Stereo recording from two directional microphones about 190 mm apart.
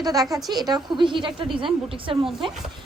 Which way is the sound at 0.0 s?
20° right (ahead or behind).